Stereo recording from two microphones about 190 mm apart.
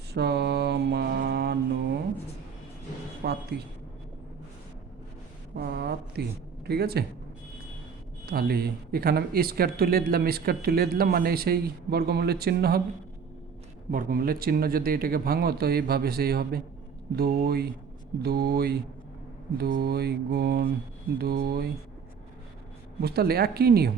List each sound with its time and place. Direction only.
0.1 s mantra: 60° right (ahead or behind)
3.2 s a sound: 55° right (ahead or behind)
5.5 s a sound: 55° right (ahead or behind)
6.7 s mantra: 55° right (ahead or behind)
8.3 s speech: 55° right (ahead or behind)
13.9 s speech: 50° right (ahead or behind)
17.2 s mantra: 55° right (ahead or behind)
23.0 s mantra: 55° right (ahead or behind)